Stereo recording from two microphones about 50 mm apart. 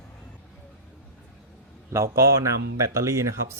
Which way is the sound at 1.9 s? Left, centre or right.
Right.